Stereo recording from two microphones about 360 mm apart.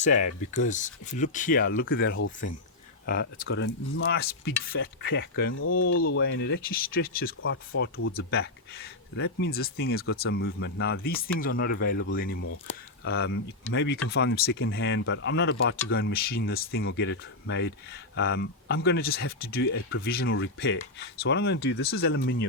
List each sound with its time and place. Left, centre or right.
0.6 s speech: left